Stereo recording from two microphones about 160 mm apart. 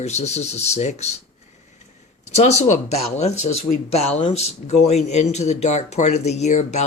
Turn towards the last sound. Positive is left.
turn(degrees=45)  # may be behind; listen again after turning